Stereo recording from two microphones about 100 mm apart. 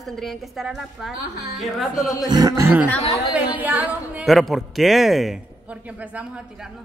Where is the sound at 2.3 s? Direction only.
40° right (ahead or behind).